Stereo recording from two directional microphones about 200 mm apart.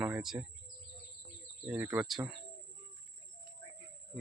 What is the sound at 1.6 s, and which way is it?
Speech, 10° right (ahead or behind).